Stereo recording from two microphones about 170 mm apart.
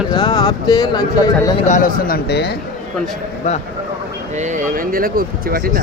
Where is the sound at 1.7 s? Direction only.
55° left (ahead or behind); by 2.5 s 75° left (ahead or behind).